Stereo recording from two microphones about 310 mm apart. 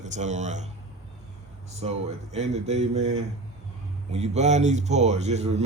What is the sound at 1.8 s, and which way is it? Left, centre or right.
A man's voice, right.